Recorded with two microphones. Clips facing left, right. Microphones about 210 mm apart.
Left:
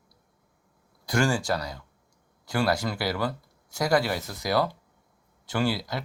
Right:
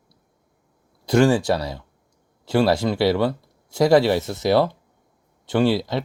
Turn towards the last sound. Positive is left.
turn(degrees=-25)  # may be behind; listen again after turning